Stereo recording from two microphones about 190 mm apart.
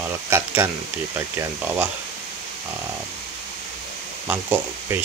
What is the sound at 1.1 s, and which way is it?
Speech, 15° right (ahead or behind).